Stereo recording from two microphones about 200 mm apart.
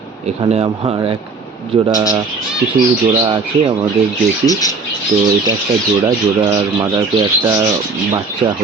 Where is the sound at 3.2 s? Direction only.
20° right (ahead or behind).